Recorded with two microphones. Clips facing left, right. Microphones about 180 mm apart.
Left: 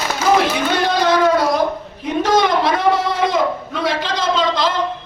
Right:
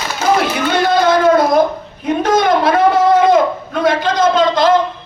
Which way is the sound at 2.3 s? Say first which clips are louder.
Right 3 dB; 50° right (ahead or behind).